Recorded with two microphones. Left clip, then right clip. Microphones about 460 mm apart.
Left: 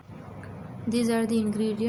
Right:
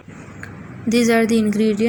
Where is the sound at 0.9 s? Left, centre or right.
Right.